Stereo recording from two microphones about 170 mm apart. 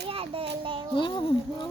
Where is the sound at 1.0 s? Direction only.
30° left (ahead or behind).